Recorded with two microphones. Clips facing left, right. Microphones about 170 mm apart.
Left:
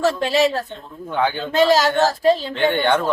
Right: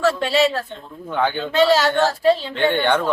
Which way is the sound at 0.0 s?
40° left (ahead or behind).